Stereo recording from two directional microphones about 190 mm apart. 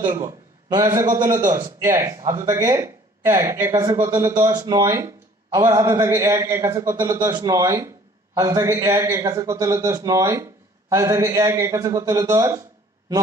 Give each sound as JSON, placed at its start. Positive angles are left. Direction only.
{"t": 0.0, "sound": "a man's voice", "side_deg": -20}